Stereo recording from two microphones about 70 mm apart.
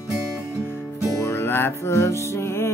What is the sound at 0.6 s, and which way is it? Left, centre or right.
Music, left.